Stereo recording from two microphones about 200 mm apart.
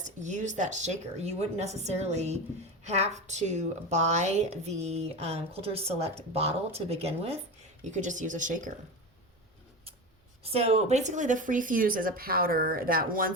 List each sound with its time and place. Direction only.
0.0 s a woman's voice: 40° right (ahead or behind)
10.4 s speech: 30° right (ahead or behind)